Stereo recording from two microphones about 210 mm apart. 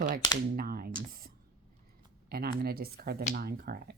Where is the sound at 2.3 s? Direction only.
45° right (ahead or behind).